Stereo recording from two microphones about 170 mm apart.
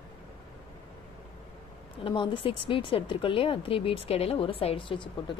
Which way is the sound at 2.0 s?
30° left (ahead or behind).